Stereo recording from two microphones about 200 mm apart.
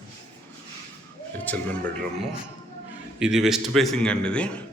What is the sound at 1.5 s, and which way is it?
Speech, 10° left (ahead or behind).